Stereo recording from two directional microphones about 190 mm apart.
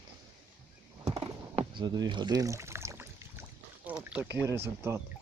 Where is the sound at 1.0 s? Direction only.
30° right (ahead or behind); by 3.4 s 10° right (ahead or behind).